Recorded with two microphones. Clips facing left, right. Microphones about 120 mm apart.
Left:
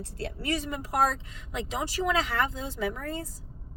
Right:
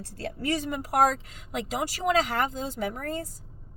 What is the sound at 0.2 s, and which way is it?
Speech, 50° right (ahead or behind).